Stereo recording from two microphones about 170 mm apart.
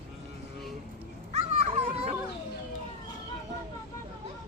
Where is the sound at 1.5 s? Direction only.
40° right (ahead or behind).